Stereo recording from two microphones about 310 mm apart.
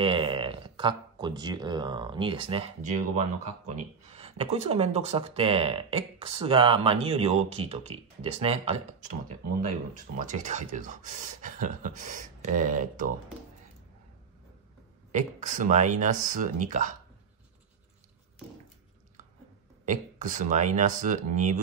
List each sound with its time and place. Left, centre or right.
0.0 s speech: centre
10.1 s speech: right
15.1 s speech: right
19.8 s speech: right